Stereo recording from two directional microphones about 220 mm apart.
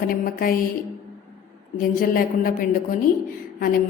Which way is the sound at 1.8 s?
40° left (ahead or behind).